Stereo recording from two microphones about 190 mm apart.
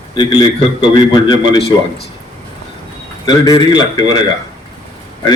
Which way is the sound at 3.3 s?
25° left (ahead or behind).